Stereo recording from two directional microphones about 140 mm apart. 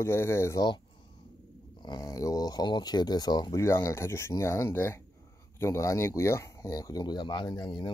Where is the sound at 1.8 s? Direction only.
30° left (ahead or behind).